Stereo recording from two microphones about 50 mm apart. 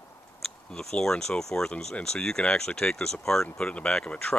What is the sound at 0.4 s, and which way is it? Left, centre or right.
Speech, centre.